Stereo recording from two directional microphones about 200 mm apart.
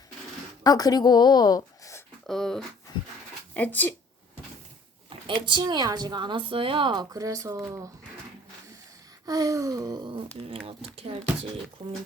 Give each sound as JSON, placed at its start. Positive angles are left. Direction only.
{"t": 0.6, "sound": "a woman's voice", "side_deg": 20}
{"t": 2.2, "sound": "speech", "side_deg": 0}
{"t": 5.0, "sound": "speech", "side_deg": -25}
{"t": 9.2, "sound": "speech", "side_deg": -20}